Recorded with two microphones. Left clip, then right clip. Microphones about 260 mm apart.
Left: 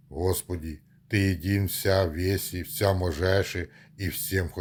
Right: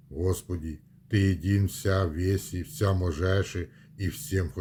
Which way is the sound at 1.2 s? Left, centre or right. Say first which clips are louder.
Left 1 dB; left.